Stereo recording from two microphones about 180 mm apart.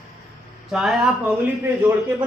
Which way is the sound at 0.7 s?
Centre (ahead or behind).